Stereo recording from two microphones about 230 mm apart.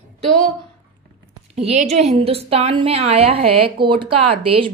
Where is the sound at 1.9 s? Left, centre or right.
Right.